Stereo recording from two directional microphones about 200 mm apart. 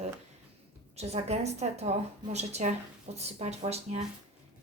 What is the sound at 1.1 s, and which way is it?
Speech, 30° right (ahead or behind).